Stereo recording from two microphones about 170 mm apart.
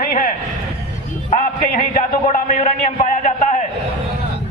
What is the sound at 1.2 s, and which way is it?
Music, 45° left (ahead or behind).